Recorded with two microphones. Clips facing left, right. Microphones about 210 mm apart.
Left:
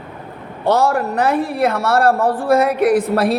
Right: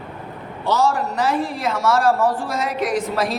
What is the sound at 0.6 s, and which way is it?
Speech, 60° left (ahead or behind).